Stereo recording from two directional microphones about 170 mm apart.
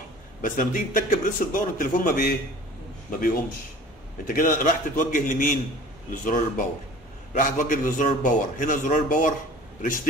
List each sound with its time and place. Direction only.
0.4 s a man's voice: 55° left (ahead or behind)